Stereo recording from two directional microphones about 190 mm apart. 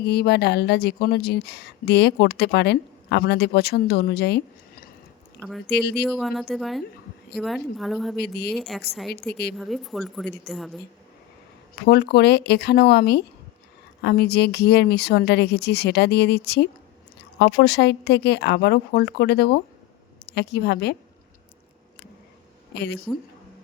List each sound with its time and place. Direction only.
0.0 s speech: 60° left (ahead or behind)
6.1 s a woman's voice: centre (ahead or behind)
8.2 s speech: 60° left (ahead or behind)
8.5 s a woman's voice: centre (ahead or behind)
11.9 s speech: 60° left (ahead or behind)
22.7 s speech: 60° left (ahead or behind)